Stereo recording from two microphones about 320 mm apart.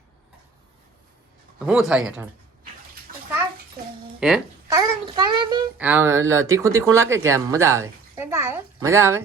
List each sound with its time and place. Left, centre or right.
1.5 s speech: centre
3.1 s bathtub: right
4.2 s a child's voice: centre
4.8 s speech: centre